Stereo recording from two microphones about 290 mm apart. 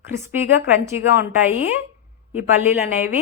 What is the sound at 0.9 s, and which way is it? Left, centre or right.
Speech, centre.